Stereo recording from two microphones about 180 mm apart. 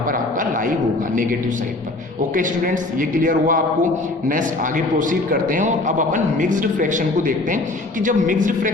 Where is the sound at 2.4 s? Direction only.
50° right (ahead or behind).